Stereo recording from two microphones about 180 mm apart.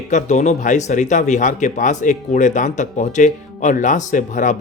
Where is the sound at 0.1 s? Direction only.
40° left (ahead or behind).